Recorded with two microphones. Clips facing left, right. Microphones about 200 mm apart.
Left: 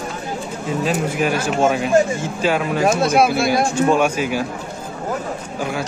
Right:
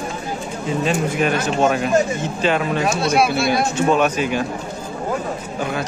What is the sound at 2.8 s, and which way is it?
Speech, 50° left (ahead or behind).